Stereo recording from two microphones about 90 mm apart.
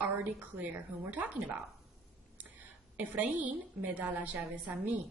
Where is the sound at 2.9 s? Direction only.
15° right (ahead or behind).